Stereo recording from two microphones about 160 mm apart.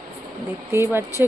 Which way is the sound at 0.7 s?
15° right (ahead or behind).